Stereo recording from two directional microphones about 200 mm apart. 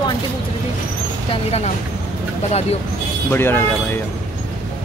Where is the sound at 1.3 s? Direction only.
30° left (ahead or behind).